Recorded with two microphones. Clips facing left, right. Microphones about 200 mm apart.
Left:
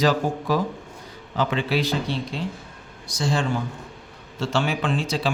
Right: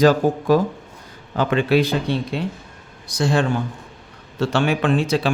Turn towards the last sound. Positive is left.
turn(degrees=-60)  # may be behind; listen again after turning